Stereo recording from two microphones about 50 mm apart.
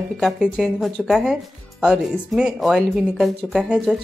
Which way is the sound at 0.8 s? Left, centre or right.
Centre.